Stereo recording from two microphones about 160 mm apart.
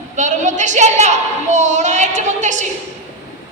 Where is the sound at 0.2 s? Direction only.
50° right (ahead or behind).